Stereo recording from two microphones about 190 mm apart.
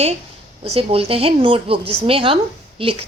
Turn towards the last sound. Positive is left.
turn(degrees=-30)  # may be behind; listen again after turning